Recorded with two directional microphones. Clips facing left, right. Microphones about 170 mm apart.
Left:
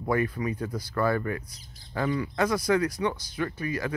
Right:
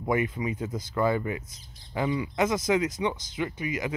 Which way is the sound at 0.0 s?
20° right (ahead or behind).